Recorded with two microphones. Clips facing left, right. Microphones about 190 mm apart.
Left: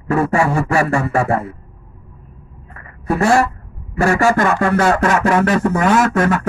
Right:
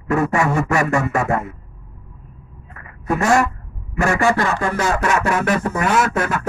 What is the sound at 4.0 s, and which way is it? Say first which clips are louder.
Speech: left 3 dB; 35° left (ahead or behind).